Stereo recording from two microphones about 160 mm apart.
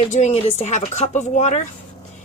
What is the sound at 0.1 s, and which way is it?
Speech, 45° left (ahead or behind).